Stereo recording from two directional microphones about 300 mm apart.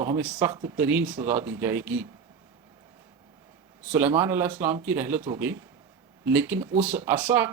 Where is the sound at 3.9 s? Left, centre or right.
Centre.